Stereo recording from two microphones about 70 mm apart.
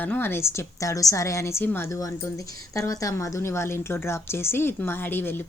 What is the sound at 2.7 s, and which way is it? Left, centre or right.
Speech, left.